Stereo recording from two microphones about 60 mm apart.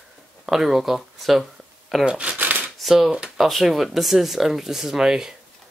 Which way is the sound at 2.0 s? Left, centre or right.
Centre.